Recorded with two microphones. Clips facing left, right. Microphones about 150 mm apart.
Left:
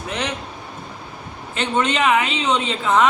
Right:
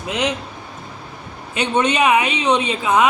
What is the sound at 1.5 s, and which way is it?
Speech, 20° right (ahead or behind).